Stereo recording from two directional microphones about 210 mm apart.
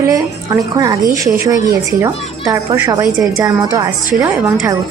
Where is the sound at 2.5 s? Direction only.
15° right (ahead or behind).